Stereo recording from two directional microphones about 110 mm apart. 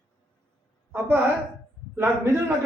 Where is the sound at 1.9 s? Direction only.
15° right (ahead or behind).